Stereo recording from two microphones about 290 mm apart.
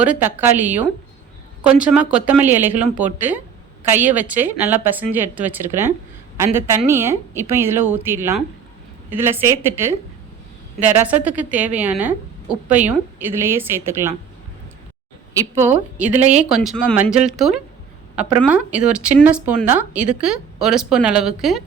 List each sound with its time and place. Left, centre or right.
0.0 s a woman's voice: centre
15.5 s speech: centre
18.7 s speech: centre